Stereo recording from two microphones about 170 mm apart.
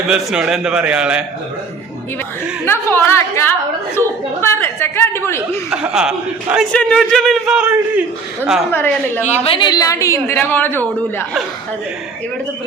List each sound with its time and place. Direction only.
0.1 s a man's voice: 5° right (ahead or behind)
2.6 s a woman's voice: 15° left (ahead or behind)
5.7 s a man's voice: 5° right (ahead or behind)
8.7 s a woman's voice: 10° left (ahead or behind)
9.4 s a woman's voice: 30° left (ahead or behind); by 11.3 s 10° left (ahead or behind)